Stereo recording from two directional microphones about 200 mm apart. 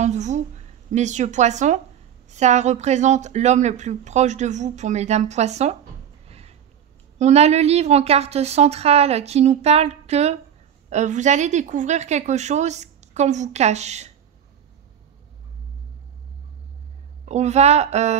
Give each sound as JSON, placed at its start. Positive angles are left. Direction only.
{"t": 0.0, "sound": "a woman's voice", "side_deg": -35}
{"t": 6.2, "sound": "a sound", "side_deg": -30}
{"t": 7.2, "sound": "a woman's voice", "side_deg": -35}
{"t": 17.2, "sound": "a woman's voice", "side_deg": -35}